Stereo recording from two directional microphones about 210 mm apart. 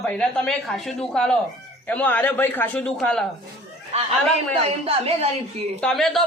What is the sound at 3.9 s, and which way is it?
A woman's voice, 30° right (ahead or behind).